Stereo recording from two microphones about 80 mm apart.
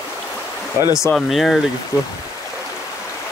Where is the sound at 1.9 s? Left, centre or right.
Left.